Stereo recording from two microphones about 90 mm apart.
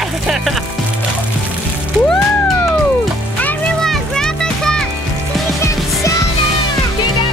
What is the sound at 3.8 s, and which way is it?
Music, 5° left (ahead or behind).